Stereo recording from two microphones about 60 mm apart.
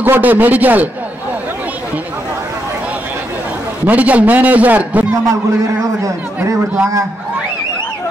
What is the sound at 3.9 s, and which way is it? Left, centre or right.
A man's voice, right.